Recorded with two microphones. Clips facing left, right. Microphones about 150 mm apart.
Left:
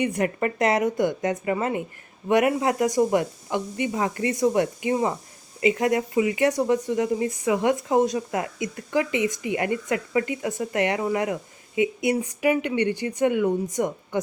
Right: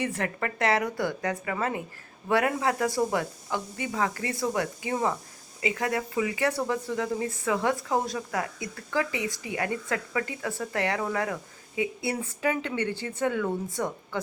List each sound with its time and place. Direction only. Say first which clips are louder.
0.0 s speech: left 6 dB; 15° left (ahead or behind)